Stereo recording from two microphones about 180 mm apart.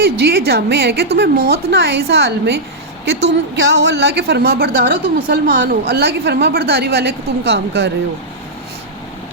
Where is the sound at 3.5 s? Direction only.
85° right.